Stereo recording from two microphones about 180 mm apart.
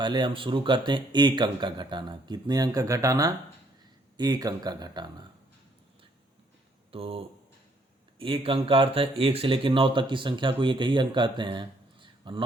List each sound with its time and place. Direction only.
0.0 s speech: 25° right (ahead or behind)
6.9 s speech: 30° right (ahead or behind)